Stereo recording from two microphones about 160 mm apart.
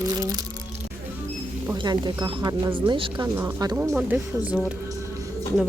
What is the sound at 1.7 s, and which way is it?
Speech, 25° right (ahead or behind).